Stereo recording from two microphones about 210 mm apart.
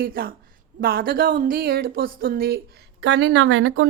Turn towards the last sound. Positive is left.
turn(degrees=-70)  # may be behind; listen again after turning